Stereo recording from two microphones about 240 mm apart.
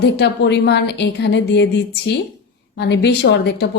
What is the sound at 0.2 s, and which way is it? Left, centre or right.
A woman's voice, left.